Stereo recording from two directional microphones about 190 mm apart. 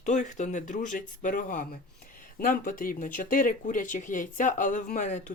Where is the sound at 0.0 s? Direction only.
40° left (ahead or behind).